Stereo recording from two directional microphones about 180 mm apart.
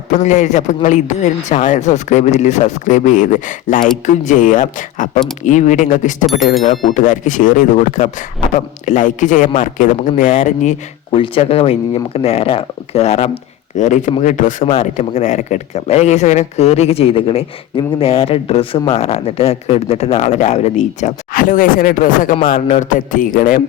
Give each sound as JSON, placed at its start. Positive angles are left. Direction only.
{"t": 0.1, "sound": "a man's voice", "side_deg": 40}
{"t": 11.1, "sound": "a man's voice", "side_deg": 30}